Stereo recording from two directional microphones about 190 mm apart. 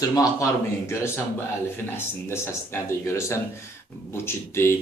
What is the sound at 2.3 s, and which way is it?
A man's voice, 15° left (ahead or behind).